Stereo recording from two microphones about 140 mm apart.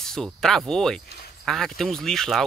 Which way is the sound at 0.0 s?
5° left (ahead or behind).